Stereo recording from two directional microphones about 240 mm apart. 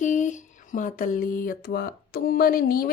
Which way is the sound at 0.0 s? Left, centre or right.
Left.